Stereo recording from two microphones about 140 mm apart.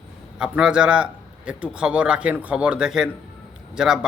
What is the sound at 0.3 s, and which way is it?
A man's voice, 5° right (ahead or behind).